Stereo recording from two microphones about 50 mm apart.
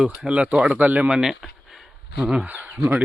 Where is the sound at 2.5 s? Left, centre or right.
Right.